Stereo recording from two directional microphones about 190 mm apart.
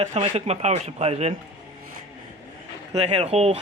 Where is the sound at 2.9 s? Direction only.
35° right (ahead or behind).